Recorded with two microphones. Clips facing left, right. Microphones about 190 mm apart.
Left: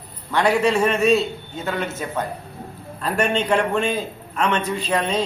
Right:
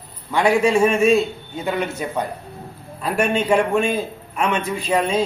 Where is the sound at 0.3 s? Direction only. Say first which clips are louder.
Right 2 dB; 10° right (ahead or behind).